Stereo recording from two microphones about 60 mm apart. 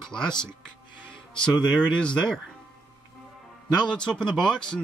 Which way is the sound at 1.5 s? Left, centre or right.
Centre.